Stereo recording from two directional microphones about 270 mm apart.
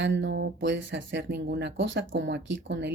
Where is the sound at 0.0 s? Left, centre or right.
Right.